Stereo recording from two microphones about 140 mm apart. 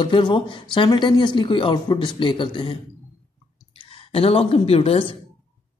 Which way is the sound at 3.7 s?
40° left (ahead or behind).